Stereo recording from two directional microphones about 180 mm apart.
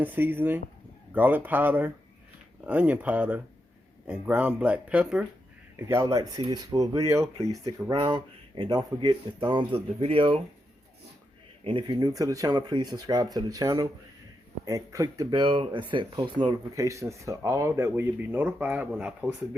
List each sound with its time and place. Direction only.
0.0 s speech: 10° right (ahead or behind); by 10.4 s 30° right (ahead or behind)
11.6 s speech: 30° right (ahead or behind); by 19.3 s 5° right (ahead or behind)